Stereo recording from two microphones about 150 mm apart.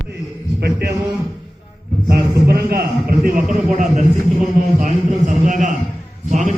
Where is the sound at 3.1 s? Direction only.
75° right (ahead or behind).